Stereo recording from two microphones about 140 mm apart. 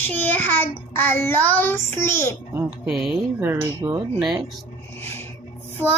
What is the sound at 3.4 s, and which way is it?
Speech, 15° right (ahead or behind).